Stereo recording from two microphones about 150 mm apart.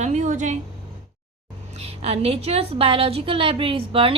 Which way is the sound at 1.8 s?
45° right (ahead or behind).